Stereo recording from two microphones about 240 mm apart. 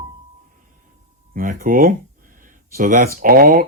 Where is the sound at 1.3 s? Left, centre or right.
Right.